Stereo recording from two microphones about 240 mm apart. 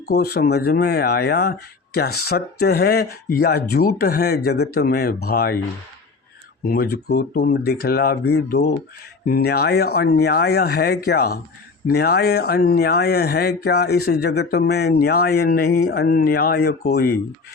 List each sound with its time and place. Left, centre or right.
0.1 s speech: left
6.7 s speech: left